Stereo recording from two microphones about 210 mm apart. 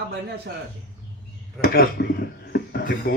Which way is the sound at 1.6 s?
45° left (ahead or behind).